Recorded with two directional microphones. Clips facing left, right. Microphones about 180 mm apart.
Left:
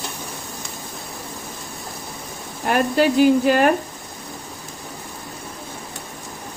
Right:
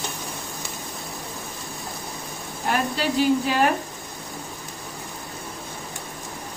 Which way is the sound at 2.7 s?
55° left (ahead or behind).